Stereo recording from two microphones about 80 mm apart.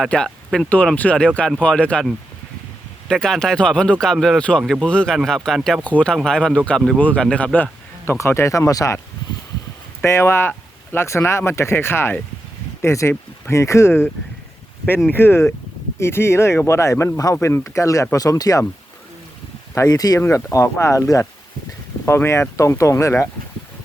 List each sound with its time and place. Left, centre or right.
0.1 s speech: centre
3.1 s speech: centre
5.8 s speech: centre
8.0 s speech: left
10.0 s speech: left
15.1 s speech: left
19.7 s speech: left
20.1 s speech: left